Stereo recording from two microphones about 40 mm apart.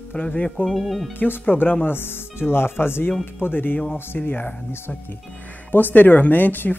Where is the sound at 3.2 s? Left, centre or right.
Left.